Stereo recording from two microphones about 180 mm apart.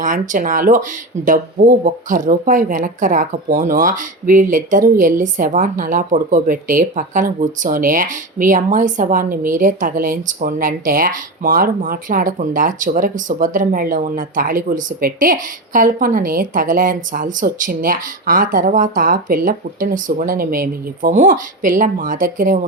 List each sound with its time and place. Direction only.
0.0 s speech: 45° right (ahead or behind)